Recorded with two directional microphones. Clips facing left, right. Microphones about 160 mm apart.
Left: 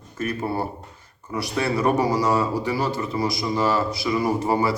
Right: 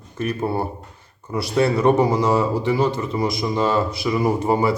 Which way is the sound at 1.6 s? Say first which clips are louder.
Right 4 dB; 25° right (ahead or behind).